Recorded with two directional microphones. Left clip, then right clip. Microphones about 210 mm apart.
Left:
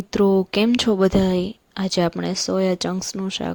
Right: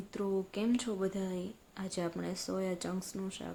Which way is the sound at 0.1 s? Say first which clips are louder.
Left 18 dB; 45° left (ahead or behind).